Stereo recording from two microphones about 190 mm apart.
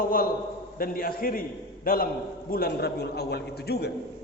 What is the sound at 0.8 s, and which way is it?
A man's voice, 50° left (ahead or behind).